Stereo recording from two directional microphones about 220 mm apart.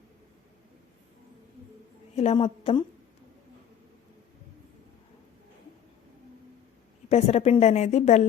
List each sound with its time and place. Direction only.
2.1 s a woman's voice: 25° left (ahead or behind)
7.1 s a woman's voice: 30° left (ahead or behind)